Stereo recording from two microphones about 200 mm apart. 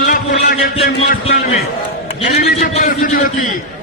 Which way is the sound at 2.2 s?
35° left (ahead or behind).